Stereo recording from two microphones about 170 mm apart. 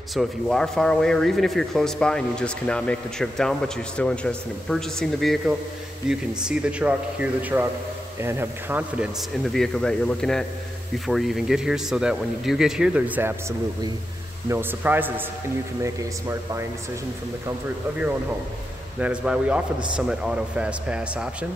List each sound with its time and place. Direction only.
0.1 s speech: centre (ahead or behind); by 16.6 s 15° right (ahead or behind)
18.9 s speech: 5° right (ahead or behind)